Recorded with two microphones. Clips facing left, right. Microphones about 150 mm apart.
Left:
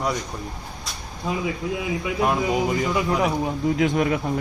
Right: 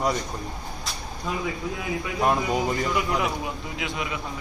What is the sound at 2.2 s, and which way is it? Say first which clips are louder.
Speech: left 1 dB; 5° left (ahead or behind).